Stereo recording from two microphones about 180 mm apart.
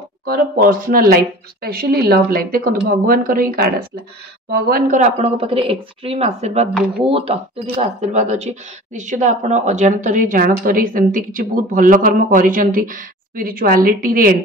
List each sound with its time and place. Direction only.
0.2 s speech: 55° right (ahead or behind)